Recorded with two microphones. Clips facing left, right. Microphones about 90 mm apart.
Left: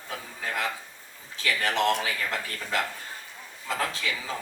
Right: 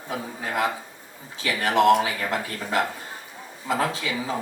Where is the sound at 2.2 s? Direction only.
35° right (ahead or behind).